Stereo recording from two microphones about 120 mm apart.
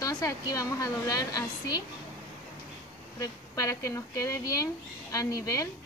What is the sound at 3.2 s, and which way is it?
Speech, 25° left (ahead or behind).